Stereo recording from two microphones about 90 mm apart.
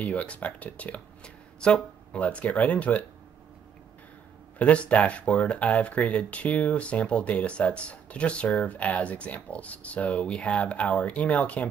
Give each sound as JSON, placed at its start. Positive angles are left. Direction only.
{"t": 0.0, "sound": "speech", "side_deg": 15}
{"t": 4.6, "sound": "speech", "side_deg": 15}